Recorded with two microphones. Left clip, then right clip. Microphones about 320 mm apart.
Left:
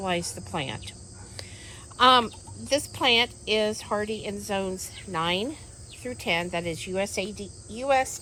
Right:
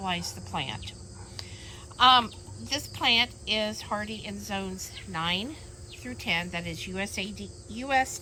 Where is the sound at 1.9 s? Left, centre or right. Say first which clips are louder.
Left 1 dB; centre.